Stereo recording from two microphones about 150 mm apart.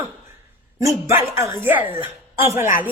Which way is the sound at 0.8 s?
20° right (ahead or behind).